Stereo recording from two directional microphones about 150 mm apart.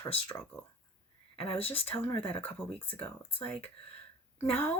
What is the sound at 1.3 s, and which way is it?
Speech, 40° left (ahead or behind).